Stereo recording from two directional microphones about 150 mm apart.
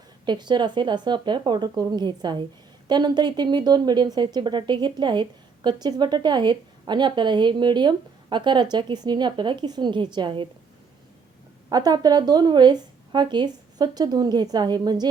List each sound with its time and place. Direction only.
0.3 s a woman's voice: 30° right (ahead or behind)
11.7 s a woman's voice: 25° right (ahead or behind)